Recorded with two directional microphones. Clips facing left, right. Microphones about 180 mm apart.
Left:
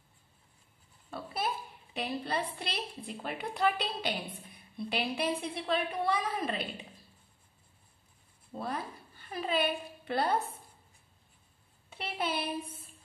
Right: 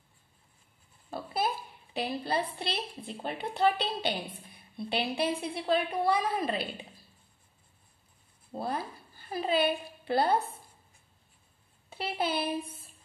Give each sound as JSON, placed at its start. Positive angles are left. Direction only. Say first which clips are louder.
{"t": 1.1, "sound": "a sound", "louder": "right 4 dB", "side_deg": -30}
{"t": 2.0, "sound": "a woman's voice", "louder": "right 3 dB", "side_deg": -30}
{"t": 8.5, "sound": "a woman's voice", "louder": "right 3 dB", "side_deg": -30}
{"t": 11.9, "sound": "speech", "louder": "right 3 dB", "side_deg": -30}